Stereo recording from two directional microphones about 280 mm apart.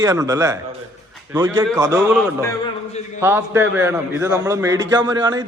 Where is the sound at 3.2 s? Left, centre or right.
Centre.